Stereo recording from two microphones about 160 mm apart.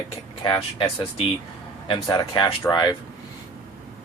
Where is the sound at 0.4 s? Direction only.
30° left (ahead or behind).